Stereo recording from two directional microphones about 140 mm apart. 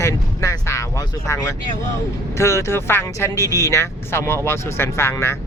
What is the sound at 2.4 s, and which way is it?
Speech, 20° left (ahead or behind).